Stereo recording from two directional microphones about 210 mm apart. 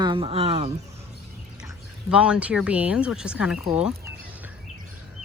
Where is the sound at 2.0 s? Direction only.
5° right (ahead or behind).